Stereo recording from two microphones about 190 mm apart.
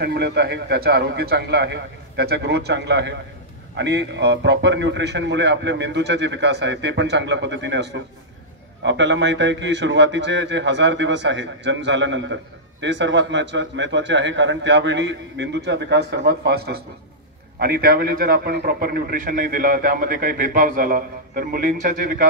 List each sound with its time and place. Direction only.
0.0 s a man's voice: 60° right (ahead or behind)